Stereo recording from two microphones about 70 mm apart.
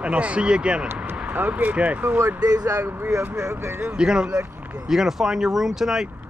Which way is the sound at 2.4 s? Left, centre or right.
Right.